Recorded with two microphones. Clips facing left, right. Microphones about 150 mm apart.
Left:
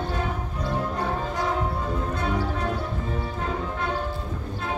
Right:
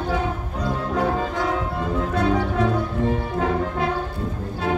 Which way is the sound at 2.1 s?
90° right.